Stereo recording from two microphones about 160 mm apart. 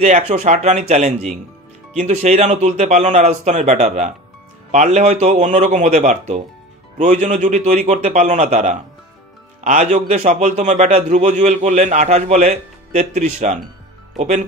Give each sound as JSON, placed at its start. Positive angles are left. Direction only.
{"t": 0.0, "sound": "a man's voice", "side_deg": -45}